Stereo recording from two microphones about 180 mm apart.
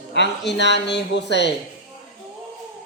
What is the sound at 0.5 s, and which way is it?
Speech, 75° left (ahead or behind).